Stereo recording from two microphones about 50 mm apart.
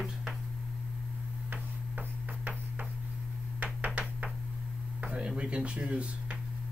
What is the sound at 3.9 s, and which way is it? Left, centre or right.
Knock, right.